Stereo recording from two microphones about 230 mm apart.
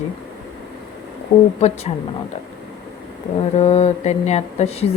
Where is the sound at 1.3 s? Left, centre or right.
Left.